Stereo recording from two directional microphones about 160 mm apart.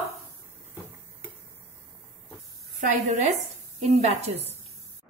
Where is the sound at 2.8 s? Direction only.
45° right (ahead or behind).